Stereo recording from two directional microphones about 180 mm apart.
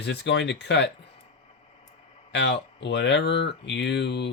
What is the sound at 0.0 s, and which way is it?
Speech, 75° left (ahead or behind).